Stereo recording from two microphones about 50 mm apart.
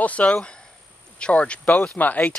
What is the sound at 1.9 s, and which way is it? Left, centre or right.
Speech, left.